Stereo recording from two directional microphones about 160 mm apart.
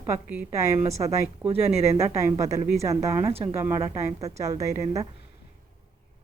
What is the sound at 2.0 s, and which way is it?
A woman's voice, 20° right (ahead or behind).